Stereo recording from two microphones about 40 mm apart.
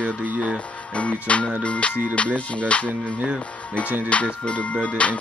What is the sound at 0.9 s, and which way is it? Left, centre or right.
Music, left.